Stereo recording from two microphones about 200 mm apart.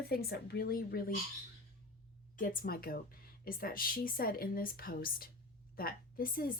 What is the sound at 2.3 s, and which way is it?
A woman's voice, 40° left (ahead or behind).